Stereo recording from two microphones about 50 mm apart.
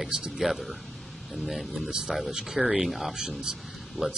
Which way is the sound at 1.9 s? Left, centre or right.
Centre.